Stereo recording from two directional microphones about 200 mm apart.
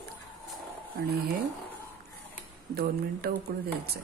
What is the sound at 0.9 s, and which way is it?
Speech, 45° right (ahead or behind).